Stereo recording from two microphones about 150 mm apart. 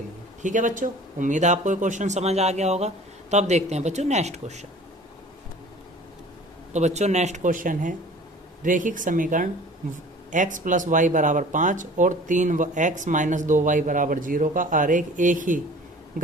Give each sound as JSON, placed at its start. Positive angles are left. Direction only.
{"t": 0.4, "sound": "speech", "side_deg": -60}
{"t": 6.7, "sound": "speech", "side_deg": -50}